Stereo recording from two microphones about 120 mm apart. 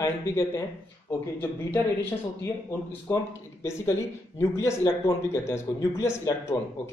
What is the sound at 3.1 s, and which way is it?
A man's voice, 25° left (ahead or behind).